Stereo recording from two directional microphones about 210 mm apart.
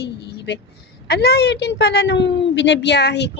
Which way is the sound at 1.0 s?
50° left (ahead or behind).